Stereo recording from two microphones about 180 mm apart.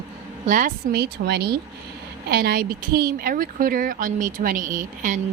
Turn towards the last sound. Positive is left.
turn(degrees=-45)  # may be behind; listen again after turning